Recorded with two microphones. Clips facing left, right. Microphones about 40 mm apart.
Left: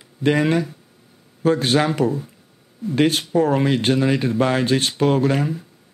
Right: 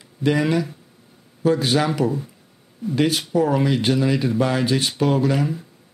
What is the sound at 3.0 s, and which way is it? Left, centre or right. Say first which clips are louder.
Speech: left 2 dB; left.